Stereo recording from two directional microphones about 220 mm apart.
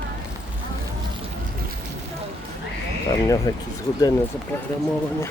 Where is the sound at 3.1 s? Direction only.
15° left (ahead or behind).